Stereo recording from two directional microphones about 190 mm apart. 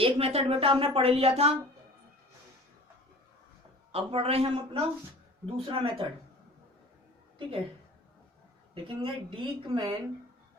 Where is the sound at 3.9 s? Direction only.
30° right (ahead or behind).